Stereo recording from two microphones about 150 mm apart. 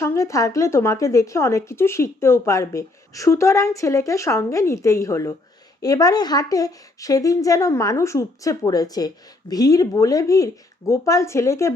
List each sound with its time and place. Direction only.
0.0 s a woman's voice: 20° left (ahead or behind)